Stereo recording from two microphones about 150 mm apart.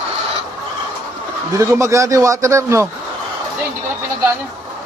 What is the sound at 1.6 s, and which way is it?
A man's voice, 20° right (ahead or behind).